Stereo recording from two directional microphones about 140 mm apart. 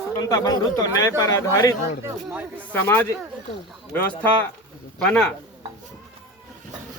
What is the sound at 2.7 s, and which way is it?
Speech, 15° left (ahead or behind).